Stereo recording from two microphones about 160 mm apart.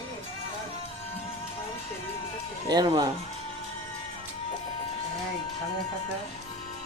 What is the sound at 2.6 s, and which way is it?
Speech, 30° right (ahead or behind).